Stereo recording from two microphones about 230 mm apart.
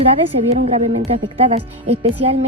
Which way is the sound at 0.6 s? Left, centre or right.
Right.